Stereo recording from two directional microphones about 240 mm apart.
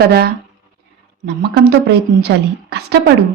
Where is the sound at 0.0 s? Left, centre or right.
Right.